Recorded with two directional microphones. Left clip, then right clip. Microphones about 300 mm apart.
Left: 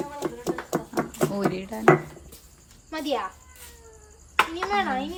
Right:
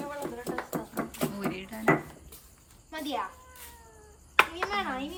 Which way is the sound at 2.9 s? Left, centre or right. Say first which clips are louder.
Left 6 dB; left.